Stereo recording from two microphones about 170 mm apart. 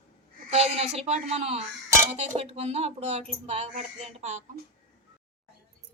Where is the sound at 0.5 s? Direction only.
35° right (ahead or behind).